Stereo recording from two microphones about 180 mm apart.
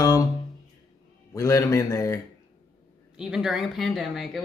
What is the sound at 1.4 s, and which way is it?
Speech, 20° left (ahead or behind).